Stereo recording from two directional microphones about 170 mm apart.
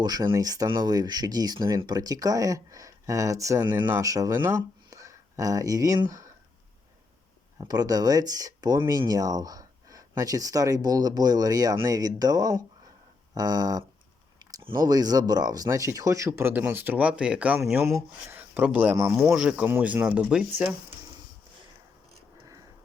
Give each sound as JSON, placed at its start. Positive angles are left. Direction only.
{"t": 0.0, "sound": "speech", "side_deg": -25}
{"t": 7.6, "sound": "speech", "side_deg": -25}
{"t": 14.8, "sound": "speech", "side_deg": -20}